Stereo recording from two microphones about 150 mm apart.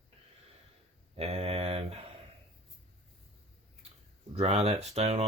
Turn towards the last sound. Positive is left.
turn(degrees=-45)  # may be behind; listen again after turning